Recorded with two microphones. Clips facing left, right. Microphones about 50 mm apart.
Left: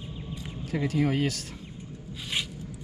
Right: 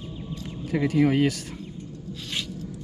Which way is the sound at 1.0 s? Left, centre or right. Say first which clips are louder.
Right 6 dB; right.